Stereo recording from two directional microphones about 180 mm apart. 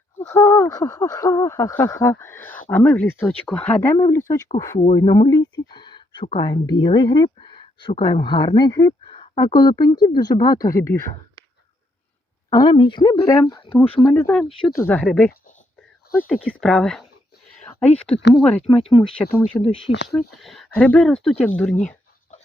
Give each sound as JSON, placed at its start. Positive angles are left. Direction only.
{"t": 0.2, "sound": "speech", "side_deg": 15}
{"t": 3.9, "sound": "speech", "side_deg": 20}
{"t": 4.8, "sound": "a sound", "side_deg": 25}
{"t": 6.2, "sound": "speech", "side_deg": 30}
{"t": 12.5, "sound": "speech", "side_deg": 25}
{"t": 19.7, "sound": "speech", "side_deg": 80}
{"t": 20.1, "sound": "speech", "side_deg": 0}